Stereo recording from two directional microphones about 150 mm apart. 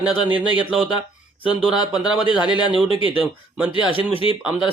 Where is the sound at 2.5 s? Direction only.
30° left (ahead or behind).